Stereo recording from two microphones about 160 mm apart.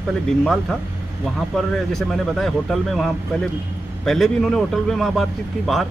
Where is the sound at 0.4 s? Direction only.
Centre (ahead or behind).